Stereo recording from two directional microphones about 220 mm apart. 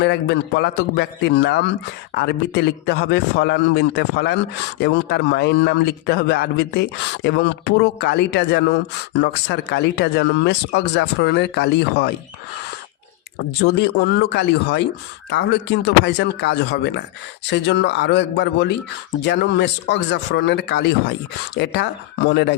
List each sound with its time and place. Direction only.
0.0 s speech: 50° left (ahead or behind)
13.6 s speech: 50° left (ahead or behind)